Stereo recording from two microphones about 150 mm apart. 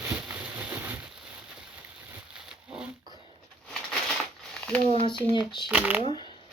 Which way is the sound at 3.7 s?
Centre (ahead or behind).